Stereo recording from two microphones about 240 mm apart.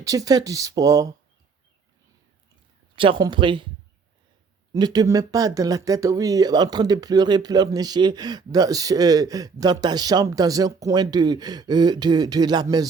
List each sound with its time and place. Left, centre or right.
0.0 s speech: centre
2.9 s speech: right
4.7 s speech: centre